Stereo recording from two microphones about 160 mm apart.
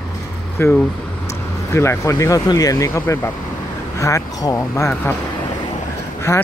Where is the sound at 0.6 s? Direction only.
15° left (ahead or behind).